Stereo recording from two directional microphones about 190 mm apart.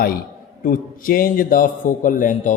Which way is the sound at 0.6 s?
50° left (ahead or behind).